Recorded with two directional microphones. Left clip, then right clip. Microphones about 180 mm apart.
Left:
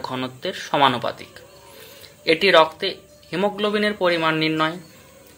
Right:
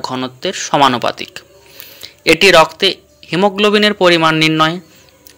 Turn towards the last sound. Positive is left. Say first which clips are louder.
# right 9 dB
turn(degrees=-35)  # may be behind; listen again after turning